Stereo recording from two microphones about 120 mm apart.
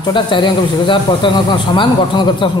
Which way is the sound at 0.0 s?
40° left (ahead or behind).